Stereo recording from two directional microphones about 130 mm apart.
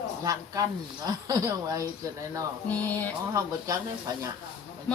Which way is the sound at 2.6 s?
15° left (ahead or behind).